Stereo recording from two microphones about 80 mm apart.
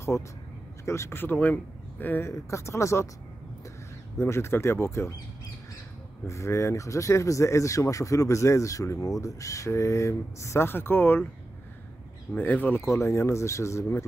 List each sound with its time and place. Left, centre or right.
0.8 s speech: left
2.2 s speech: left
4.2 s speech: left
6.2 s speech: left
12.4 s speech: left
12.8 s speech: left